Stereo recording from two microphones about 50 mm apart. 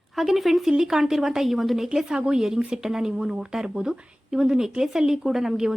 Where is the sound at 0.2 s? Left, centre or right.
Centre.